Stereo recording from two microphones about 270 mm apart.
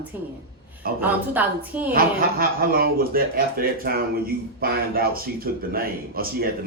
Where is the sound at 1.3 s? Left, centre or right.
Centre.